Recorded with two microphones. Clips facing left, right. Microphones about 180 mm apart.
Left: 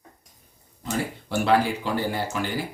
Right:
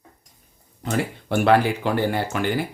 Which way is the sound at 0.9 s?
60° right (ahead or behind).